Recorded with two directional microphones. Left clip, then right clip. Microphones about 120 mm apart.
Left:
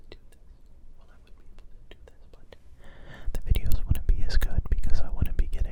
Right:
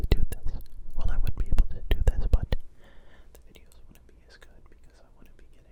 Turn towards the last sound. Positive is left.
turn(degrees=55)  # may be behind; listen again after turning